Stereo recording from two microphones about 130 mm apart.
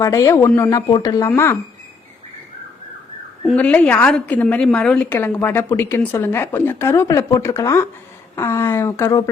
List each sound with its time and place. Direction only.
0.0 s speech: 25° left (ahead or behind)
0.9 s speech: 35° left (ahead or behind)
3.4 s a woman's voice: 10° left (ahead or behind)